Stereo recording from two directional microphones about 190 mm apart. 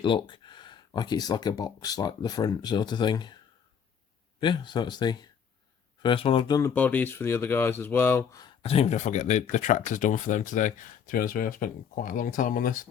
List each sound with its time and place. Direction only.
0.0 s speech: 25° left (ahead or behind)
4.4 s speech: 25° left (ahead or behind)
6.6 s speech: 10° left (ahead or behind)
8.6 s speech: 30° left (ahead or behind)